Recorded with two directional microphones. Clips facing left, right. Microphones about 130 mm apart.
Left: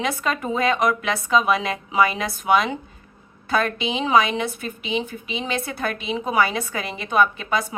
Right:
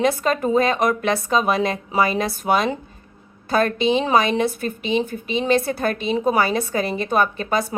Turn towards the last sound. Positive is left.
turn(degrees=-40)  # may be behind; listen again after turning